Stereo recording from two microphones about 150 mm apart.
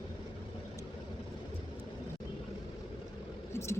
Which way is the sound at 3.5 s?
20° left (ahead or behind).